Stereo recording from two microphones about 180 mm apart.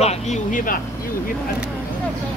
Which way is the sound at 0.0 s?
35° left (ahead or behind).